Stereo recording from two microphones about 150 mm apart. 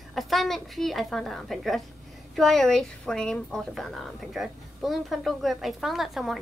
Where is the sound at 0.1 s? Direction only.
Centre (ahead or behind).